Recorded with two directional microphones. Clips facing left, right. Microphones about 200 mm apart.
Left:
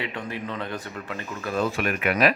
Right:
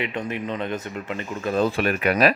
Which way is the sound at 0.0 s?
20° right (ahead or behind).